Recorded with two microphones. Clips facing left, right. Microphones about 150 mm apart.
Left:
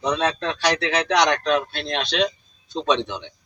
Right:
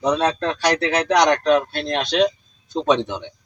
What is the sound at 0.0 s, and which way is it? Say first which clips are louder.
A man's voice: right 3 dB; 40° right (ahead or behind).